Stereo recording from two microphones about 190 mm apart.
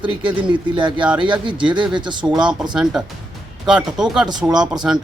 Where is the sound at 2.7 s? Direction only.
Centre (ahead or behind).